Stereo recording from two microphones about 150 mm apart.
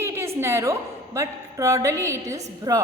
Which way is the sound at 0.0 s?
15° right (ahead or behind).